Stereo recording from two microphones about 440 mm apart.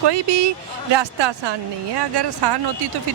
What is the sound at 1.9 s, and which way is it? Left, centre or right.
Speech, right.